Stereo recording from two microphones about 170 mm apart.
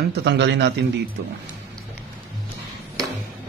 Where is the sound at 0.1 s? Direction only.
90° right.